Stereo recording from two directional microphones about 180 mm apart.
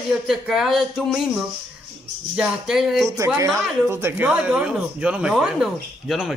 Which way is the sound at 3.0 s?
15° right (ahead or behind).